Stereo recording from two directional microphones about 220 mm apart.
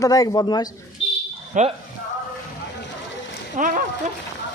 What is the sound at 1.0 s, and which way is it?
Buzzer, 60° left (ahead or behind).